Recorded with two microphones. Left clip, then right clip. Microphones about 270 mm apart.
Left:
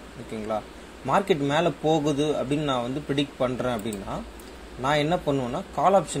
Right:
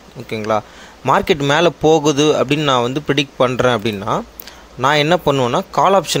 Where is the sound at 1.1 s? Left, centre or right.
Right.